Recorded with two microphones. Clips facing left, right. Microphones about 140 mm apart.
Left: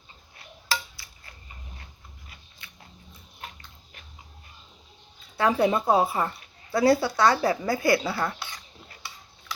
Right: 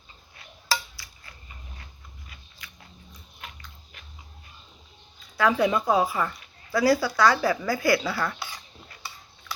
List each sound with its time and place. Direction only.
2.6 s dog: 25° left (ahead or behind)
3.1 s biting: 30° left (ahead or behind)
5.4 s a woman's voice: 30° left (ahead or behind)
8.4 s a sound: 5° right (ahead or behind)